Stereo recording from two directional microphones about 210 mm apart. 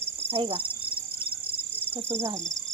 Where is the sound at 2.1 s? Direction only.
10° right (ahead or behind).